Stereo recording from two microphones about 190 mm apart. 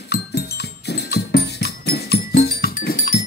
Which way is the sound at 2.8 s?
40° left (ahead or behind).